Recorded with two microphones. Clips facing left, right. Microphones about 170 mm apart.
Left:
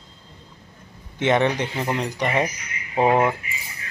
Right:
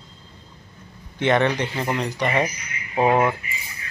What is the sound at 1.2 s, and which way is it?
Speech, 15° left (ahead or behind).